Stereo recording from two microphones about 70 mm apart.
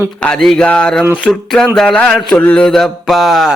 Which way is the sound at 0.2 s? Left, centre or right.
Centre.